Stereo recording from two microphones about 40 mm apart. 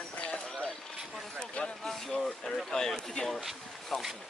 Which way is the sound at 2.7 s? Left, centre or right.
Centre.